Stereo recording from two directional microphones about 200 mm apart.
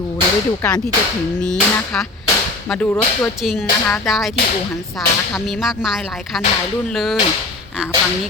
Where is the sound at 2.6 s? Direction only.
5° left (ahead or behind).